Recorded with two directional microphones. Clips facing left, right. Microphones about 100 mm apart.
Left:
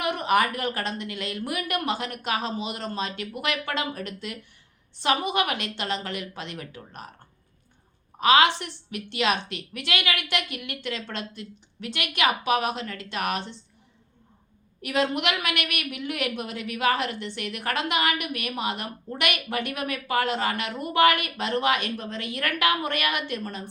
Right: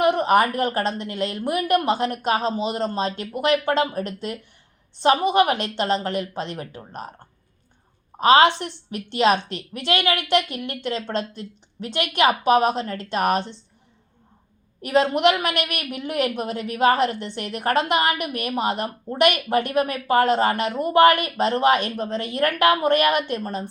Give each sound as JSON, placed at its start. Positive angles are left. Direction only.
{"t": 0.0, "sound": "a woman's voice", "side_deg": -30}
{"t": 8.2, "sound": "a woman's voice", "side_deg": -35}
{"t": 14.8, "sound": "a woman's voice", "side_deg": -35}